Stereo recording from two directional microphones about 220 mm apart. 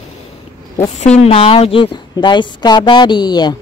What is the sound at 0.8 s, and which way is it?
Speech, 30° left (ahead or behind).